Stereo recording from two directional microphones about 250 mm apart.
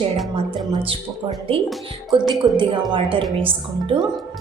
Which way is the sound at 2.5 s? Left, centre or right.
Centre.